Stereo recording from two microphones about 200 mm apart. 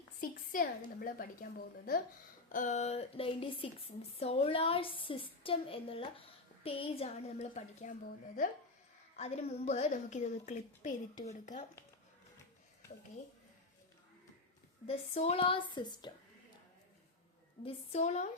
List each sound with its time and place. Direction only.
0.2 s a woman's voice: 45° left (ahead or behind)
9.1 s a woman's voice: 30° left (ahead or behind)
14.8 s a woman's voice: 30° left (ahead or behind)
17.9 s a woman's voice: 35° left (ahead or behind)